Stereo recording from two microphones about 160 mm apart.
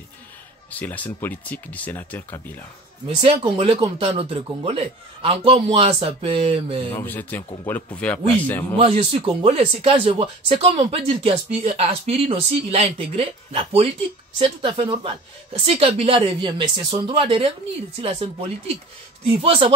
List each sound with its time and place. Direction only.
0.7 s speech: 10° left (ahead or behind)
3.2 s speech: 35° right (ahead or behind)
7.0 s speech: 10° left (ahead or behind)
8.7 s speech: 35° right (ahead or behind)